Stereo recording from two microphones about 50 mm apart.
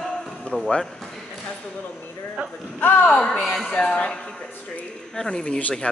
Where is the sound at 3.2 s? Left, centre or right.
Centre.